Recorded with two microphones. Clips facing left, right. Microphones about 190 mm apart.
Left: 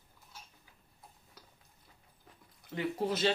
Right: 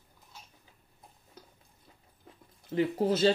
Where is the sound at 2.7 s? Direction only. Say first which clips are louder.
Right 6 dB; 30° right (ahead or behind).